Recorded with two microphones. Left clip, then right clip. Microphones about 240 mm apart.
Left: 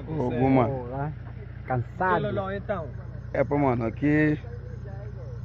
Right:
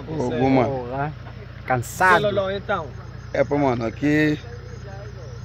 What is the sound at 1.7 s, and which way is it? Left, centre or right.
Speech, right.